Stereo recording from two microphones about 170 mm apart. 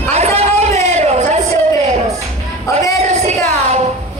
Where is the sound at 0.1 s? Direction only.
40° right (ahead or behind).